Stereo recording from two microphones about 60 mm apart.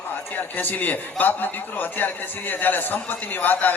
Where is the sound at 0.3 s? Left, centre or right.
Left.